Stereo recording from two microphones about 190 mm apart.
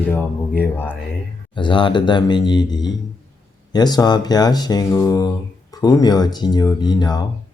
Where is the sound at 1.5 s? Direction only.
25° left (ahead or behind).